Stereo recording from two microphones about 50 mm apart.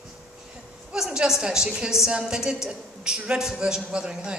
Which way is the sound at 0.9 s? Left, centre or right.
Centre.